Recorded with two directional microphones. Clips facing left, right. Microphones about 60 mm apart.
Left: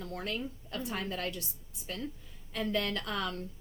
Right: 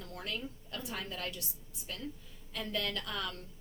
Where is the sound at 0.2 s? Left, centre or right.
Left.